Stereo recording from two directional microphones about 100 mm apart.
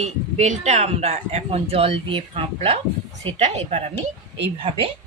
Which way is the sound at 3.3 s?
90° right.